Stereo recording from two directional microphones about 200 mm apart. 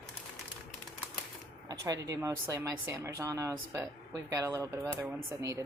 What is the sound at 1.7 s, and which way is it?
Speech, 15° right (ahead or behind).